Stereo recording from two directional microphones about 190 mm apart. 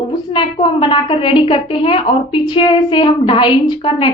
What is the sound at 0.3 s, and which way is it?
A woman's voice, 25° left (ahead or behind).